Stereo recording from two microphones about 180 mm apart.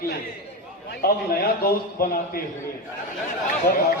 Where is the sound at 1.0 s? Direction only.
55° left (ahead or behind).